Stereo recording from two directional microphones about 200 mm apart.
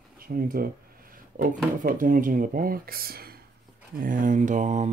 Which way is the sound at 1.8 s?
45° right (ahead or behind).